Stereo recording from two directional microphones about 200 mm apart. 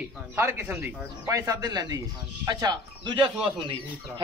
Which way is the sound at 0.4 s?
10° right (ahead or behind).